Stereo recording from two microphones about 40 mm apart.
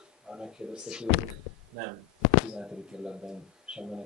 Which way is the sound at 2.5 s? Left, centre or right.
Centre.